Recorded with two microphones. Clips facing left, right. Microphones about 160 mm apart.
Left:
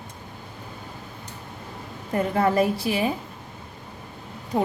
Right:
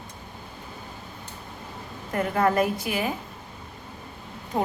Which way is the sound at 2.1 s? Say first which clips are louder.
Left 1 dB; 30° left (ahead or behind).